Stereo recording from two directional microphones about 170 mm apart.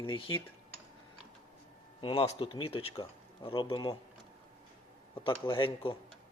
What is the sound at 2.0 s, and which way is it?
Speech, 35° left (ahead or behind).